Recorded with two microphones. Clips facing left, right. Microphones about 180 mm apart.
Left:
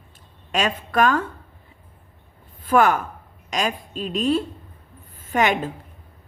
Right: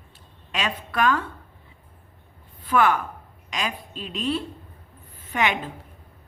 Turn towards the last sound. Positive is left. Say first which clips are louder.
# left 5 dB
turn(degrees=45)  # may be behind; listen again after turning